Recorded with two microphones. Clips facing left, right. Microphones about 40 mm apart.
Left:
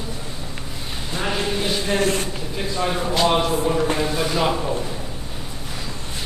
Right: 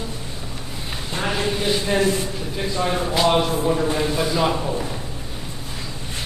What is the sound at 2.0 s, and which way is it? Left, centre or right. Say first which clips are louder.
Speech: right 1 dB; left.